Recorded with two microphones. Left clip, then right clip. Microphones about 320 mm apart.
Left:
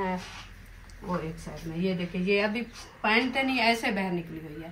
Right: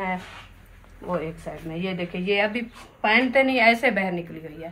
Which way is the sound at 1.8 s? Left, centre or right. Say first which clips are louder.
Right 2 dB; centre.